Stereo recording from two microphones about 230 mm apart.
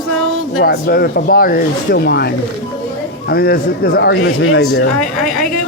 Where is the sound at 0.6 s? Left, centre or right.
Left.